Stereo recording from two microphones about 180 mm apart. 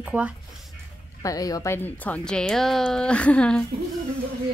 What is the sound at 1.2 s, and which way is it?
Speech, 20° left (ahead or behind).